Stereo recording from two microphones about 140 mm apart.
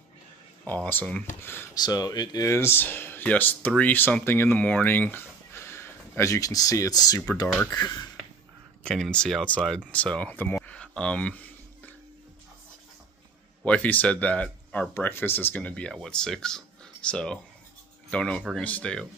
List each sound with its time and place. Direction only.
0.7 s speech: 15° left (ahead or behind)
1.8 s speech: 30° left (ahead or behind)
8.8 s speech: 5° left (ahead or behind)
13.7 s speech: 10° left (ahead or behind)